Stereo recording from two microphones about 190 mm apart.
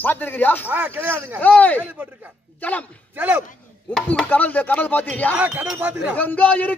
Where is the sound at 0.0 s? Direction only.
10° left (ahead or behind).